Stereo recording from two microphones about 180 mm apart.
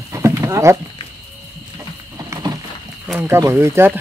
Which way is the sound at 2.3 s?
20° right (ahead or behind).